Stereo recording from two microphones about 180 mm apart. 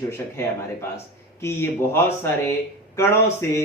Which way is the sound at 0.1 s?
15° left (ahead or behind).